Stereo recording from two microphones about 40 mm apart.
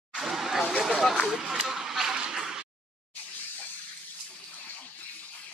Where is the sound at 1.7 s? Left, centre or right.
Centre.